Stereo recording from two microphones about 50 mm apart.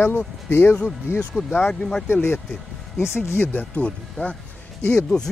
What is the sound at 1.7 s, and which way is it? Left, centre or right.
Speech, centre.